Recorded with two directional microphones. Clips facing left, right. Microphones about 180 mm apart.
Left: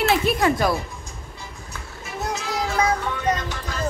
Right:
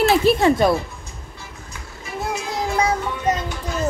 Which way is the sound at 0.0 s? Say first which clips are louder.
Right 4 dB; 30° right (ahead or behind).